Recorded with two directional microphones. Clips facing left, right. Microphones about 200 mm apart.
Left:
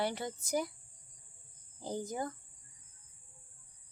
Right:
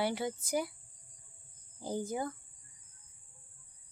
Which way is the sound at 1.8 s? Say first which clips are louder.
Right 2 dB; 10° right (ahead or behind).